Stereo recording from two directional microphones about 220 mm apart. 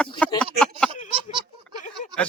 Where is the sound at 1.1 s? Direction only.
20° right (ahead or behind).